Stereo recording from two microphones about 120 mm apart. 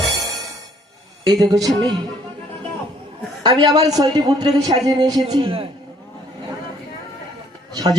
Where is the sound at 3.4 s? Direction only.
35° right (ahead or behind).